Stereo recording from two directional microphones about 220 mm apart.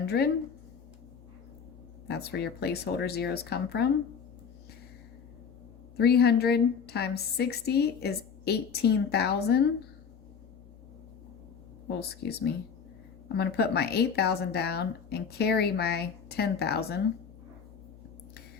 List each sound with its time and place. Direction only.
0.0 s speech: 45° left (ahead or behind)
2.0 s a woman's voice: 45° left (ahead or behind)
6.0 s a woman's voice: 45° left (ahead or behind)
11.9 s a woman's voice: 50° left (ahead or behind)